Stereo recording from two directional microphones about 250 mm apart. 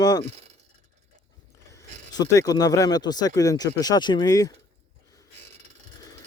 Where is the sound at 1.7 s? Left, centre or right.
Centre.